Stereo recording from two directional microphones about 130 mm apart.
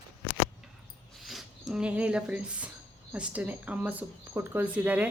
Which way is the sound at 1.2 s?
Centre (ahead or behind).